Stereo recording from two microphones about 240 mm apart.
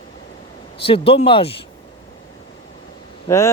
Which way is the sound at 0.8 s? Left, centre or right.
Left.